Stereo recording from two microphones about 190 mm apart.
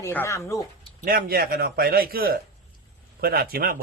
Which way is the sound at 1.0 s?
50° right (ahead or behind).